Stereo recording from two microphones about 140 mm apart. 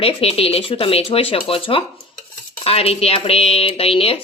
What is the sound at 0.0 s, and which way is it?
Speech, 45° left (ahead or behind).